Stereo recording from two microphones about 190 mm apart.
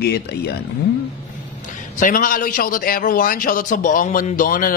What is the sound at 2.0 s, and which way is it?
Speech, 45° left (ahead or behind).